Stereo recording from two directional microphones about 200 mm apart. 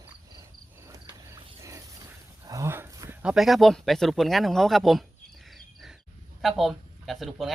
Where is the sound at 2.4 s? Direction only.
15° right (ahead or behind).